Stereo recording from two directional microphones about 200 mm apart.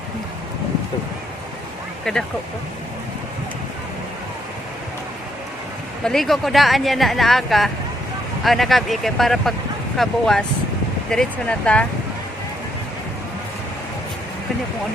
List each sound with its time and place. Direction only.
2.1 s speech: 5° left (ahead or behind)
6.1 s speech: centre (ahead or behind)